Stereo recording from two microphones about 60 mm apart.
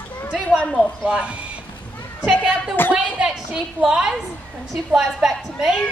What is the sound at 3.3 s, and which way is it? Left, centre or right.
A woman's voice, centre.